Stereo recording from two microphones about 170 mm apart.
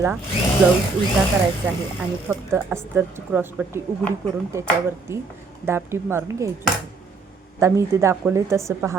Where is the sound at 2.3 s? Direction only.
10° right (ahead or behind).